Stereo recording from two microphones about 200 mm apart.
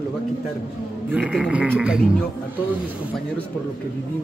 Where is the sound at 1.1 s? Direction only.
5° right (ahead or behind).